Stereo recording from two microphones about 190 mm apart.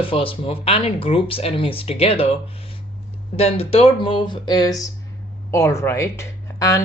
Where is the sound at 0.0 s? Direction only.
30° left (ahead or behind).